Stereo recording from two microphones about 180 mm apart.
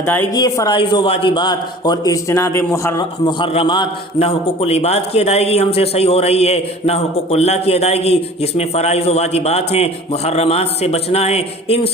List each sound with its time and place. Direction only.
0.0 s a man's voice: 10° left (ahead or behind)
3.4 s a man's voice: 30° left (ahead or behind)